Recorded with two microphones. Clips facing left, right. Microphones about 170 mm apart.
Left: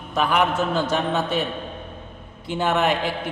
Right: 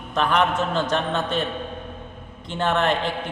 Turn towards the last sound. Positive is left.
turn(degrees=10)  # may be behind; listen again after turning